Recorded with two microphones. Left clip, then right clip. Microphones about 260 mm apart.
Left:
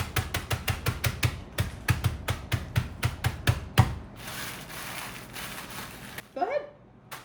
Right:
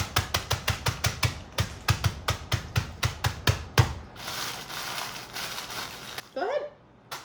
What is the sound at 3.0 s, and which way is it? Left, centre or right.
Drum, centre.